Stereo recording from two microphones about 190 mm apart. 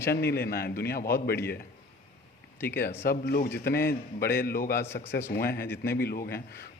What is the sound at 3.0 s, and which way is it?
A man's voice, 55° left (ahead or behind).